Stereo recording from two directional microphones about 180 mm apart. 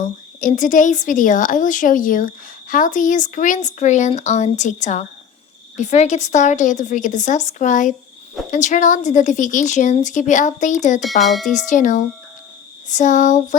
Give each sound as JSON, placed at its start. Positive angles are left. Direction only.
{"t": 0.0, "sound": "a woman's voice", "side_deg": 45}
{"t": 11.0, "sound": "speech", "side_deg": 0}
{"t": 11.7, "sound": "a woman's voice", "side_deg": 45}